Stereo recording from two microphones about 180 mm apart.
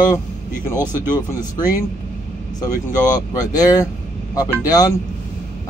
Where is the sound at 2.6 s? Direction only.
20° left (ahead or behind).